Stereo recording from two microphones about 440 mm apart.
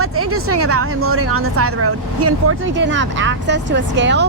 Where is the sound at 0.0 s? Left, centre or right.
Right.